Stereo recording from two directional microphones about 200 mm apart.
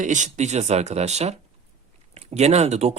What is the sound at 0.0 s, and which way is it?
Speech, 40° right (ahead or behind).